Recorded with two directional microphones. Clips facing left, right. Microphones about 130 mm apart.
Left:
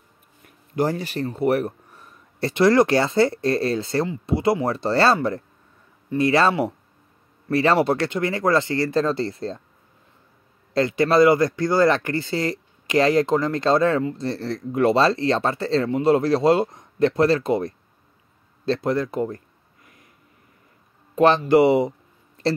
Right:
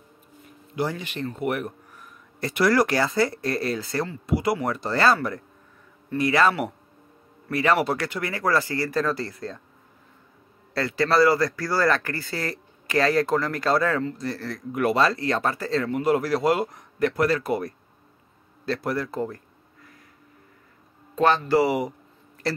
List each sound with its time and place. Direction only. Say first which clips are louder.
0.7 s speech: left 5 dB; 40° left (ahead or behind)
10.7 s speech: left 4 dB; 20° left (ahead or behind)
21.1 s speech: left 4 dB; 20° left (ahead or behind)